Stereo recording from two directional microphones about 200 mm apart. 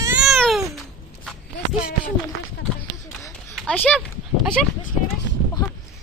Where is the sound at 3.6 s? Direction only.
5° left (ahead or behind).